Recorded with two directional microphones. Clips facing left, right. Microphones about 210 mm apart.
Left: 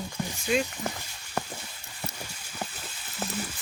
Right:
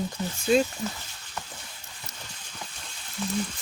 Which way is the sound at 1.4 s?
60° left (ahead or behind).